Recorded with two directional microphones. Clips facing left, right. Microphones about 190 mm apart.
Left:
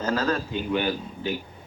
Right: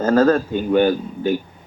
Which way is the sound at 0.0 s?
50° right (ahead or behind).